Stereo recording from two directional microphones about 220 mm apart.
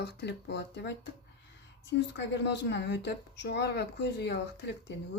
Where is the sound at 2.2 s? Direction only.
50° left (ahead or behind).